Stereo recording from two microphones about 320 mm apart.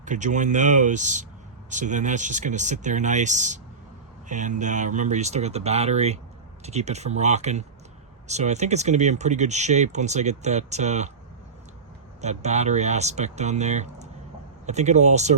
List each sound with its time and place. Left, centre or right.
0.0 s speech: right
12.2 s speech: right